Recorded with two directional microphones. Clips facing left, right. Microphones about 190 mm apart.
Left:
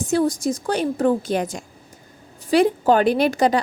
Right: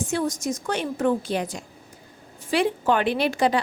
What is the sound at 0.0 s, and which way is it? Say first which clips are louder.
A woman's voice: left 6 dB; 40° left (ahead or behind).